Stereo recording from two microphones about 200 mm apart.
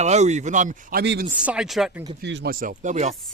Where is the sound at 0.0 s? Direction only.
35° right (ahead or behind).